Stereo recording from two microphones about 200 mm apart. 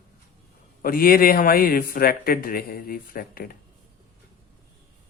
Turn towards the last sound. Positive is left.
turn(degrees=45)  # may be behind; listen again after turning